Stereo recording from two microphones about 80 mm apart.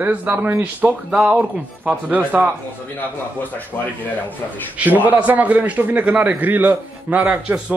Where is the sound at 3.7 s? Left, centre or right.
Left.